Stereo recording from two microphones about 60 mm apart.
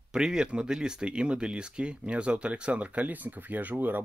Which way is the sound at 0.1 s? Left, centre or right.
Centre.